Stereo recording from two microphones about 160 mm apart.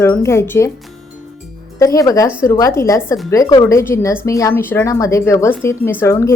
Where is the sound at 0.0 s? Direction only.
15° left (ahead or behind).